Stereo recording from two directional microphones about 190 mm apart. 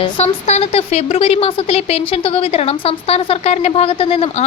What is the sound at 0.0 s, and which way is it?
A woman's voice, 35° left (ahead or behind).